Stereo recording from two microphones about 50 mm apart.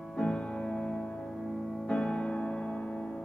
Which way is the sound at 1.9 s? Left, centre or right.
Centre.